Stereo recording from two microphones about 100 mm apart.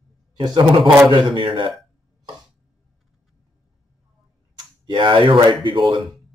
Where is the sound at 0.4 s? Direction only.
50° right (ahead or behind).